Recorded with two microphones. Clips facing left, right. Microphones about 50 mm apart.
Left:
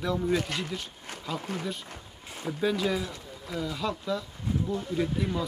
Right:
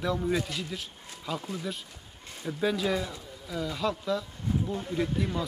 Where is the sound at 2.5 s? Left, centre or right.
Centre.